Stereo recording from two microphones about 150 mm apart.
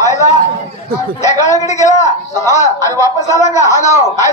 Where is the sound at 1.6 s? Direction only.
50° left (ahead or behind).